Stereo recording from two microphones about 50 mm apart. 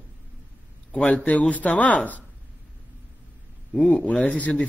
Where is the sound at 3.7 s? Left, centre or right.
Centre.